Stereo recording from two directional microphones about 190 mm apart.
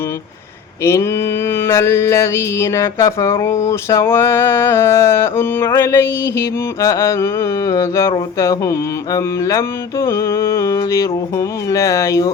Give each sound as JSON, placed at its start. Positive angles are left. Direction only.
{"t": 1.5, "sound": "mantra", "side_deg": 15}